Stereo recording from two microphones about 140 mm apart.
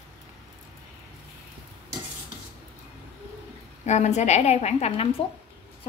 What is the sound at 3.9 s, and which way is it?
A woman's voice, 55° left (ahead or behind).